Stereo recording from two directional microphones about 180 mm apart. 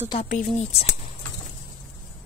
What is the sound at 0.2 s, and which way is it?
Speech, 45° left (ahead or behind).